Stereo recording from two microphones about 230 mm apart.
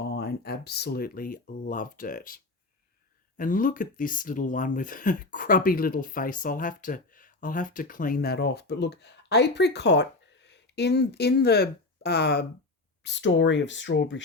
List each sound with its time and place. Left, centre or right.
0.0 s speech: left